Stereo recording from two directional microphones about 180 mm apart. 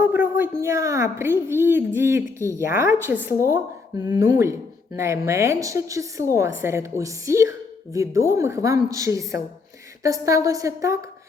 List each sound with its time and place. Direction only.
0.0 s a woman's voice: 10° right (ahead or behind)